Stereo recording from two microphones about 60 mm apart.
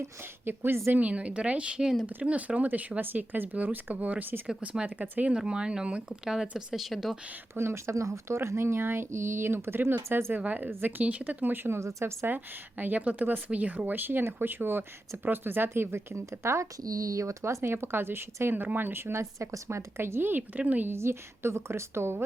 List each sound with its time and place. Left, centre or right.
0.4 s speech: right
0.9 s speech: right
5.3 s speech: centre
7.5 s speech: right
8.4 s speech: right
10.4 s speech: right
12.2 s speech: right
16.8 s speech: right
20.6 s speech: right
20.9 s speech: right